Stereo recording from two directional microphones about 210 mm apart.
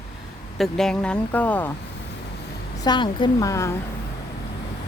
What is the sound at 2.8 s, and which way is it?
Speech, 20° left (ahead or behind).